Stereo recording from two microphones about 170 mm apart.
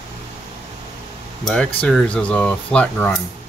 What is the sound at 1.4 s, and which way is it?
Speech, 5° left (ahead or behind).